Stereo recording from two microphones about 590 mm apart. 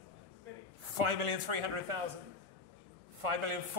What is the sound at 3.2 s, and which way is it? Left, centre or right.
Speech, right.